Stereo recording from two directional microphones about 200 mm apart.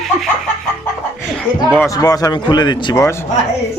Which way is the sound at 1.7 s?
15° left (ahead or behind).